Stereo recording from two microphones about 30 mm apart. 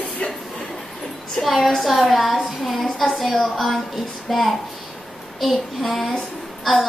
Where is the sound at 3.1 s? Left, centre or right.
Centre.